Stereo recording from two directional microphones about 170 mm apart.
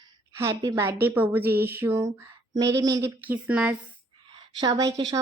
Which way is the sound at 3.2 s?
10° right (ahead or behind).